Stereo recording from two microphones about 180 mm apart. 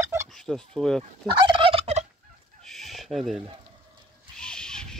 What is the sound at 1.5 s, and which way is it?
Fowl, 30° right (ahead or behind).